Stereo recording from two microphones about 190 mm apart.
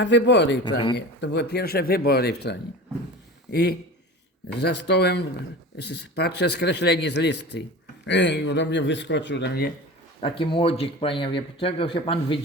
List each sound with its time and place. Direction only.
0.0 s speech: 70° left (ahead or behind)
10.2 s speech: 25° left (ahead or behind)